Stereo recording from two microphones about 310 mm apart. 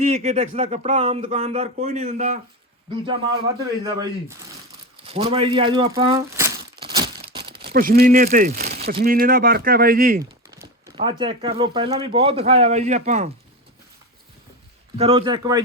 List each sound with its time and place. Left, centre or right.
0.0 s speech: right
3.6 s speech: centre
7.0 s speech: right
10.8 s speech: centre
14.9 s speech: centre